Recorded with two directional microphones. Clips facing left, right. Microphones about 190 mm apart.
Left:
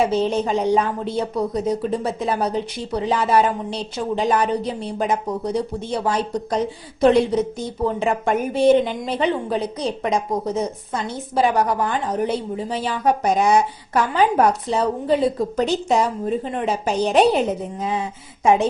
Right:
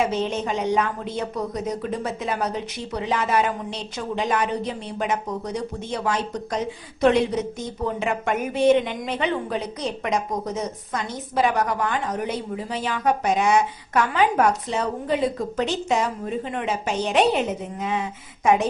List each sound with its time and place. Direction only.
0.1 s a woman's voice: 35° left (ahead or behind)
18.4 s a woman's voice: 30° left (ahead or behind)